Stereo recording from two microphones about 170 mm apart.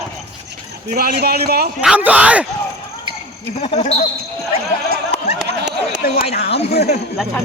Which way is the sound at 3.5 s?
40° left (ahead or behind).